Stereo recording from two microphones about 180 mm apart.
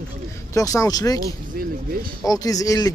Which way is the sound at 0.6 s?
20° left (ahead or behind).